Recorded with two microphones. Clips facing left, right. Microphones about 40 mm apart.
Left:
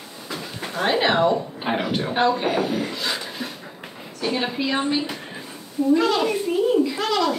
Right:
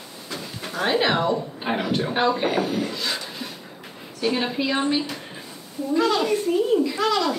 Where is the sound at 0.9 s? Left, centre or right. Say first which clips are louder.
Left 2 dB; centre.